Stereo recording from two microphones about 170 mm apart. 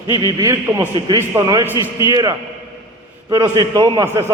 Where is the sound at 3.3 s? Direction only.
20° right (ahead or behind).